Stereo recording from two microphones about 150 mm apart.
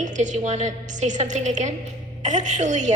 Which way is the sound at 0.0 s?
50° right (ahead or behind).